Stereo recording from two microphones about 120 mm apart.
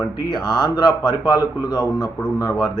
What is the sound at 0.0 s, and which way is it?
Speech, 35° left (ahead or behind).